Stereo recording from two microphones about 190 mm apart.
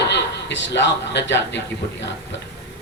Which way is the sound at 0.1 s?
65° left (ahead or behind).